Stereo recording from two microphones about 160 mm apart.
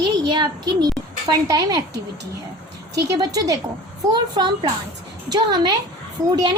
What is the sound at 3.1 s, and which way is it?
A woman's voice, 20° right (ahead or behind).